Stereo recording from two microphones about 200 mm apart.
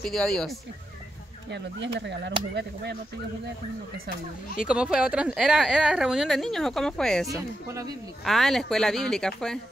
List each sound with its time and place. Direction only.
0.0 s speech: centre (ahead or behind)
2.0 s speech: 60° right (ahead or behind)
4.6 s speech: 5° right (ahead or behind)
7.2 s speech: 15° right (ahead or behind)
8.2 s speech: centre (ahead or behind)